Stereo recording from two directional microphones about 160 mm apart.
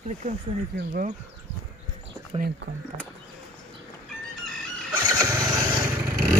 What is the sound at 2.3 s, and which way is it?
Speech, 40° right (ahead or behind).